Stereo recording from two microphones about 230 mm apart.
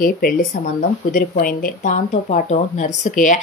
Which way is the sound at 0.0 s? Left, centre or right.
Left.